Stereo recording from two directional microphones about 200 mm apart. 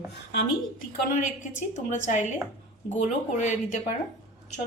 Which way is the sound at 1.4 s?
35° left (ahead or behind).